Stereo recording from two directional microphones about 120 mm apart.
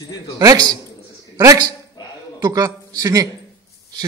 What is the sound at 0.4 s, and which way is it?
A man's voice, 30° right (ahead or behind).